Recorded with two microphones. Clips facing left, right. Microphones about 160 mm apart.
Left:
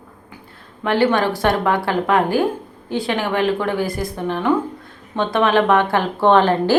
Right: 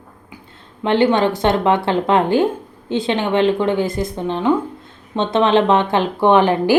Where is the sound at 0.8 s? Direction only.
25° right (ahead or behind).